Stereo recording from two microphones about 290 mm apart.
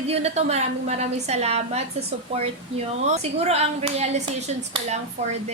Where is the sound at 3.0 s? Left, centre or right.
Right.